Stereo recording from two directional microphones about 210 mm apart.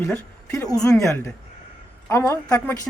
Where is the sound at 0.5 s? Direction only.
15° left (ahead or behind).